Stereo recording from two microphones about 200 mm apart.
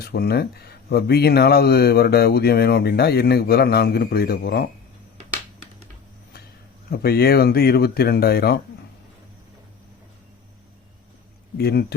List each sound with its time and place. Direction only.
0.0 s speech: 55° left (ahead or behind)
6.9 s speech: 50° left (ahead or behind)
11.5 s speech: 50° left (ahead or behind)